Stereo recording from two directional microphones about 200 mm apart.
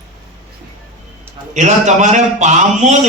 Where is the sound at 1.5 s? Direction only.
35° right (ahead or behind).